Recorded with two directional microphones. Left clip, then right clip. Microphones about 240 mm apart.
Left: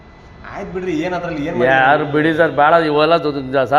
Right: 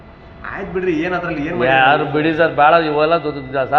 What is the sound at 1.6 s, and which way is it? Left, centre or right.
A man's voice, left.